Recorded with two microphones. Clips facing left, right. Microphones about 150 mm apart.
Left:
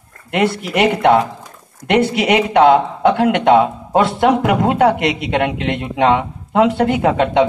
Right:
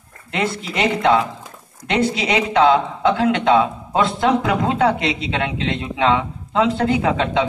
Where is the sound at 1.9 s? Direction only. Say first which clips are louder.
Left 5 dB; 55° left (ahead or behind).